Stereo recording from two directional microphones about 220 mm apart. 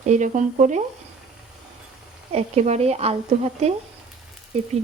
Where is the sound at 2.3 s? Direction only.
30° right (ahead or behind).